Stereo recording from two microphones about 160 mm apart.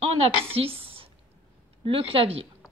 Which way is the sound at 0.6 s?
35° right (ahead or behind).